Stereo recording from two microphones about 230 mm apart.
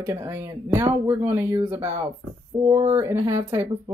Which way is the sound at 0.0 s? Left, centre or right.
Centre.